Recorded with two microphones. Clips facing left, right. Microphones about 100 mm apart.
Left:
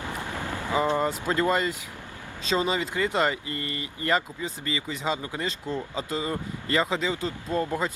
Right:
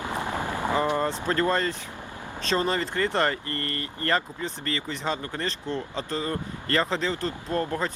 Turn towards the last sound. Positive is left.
turn(degrees=15)  # may be behind; listen again after turning